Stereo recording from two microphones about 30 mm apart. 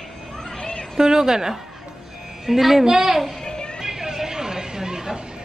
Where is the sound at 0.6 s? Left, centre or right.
Left.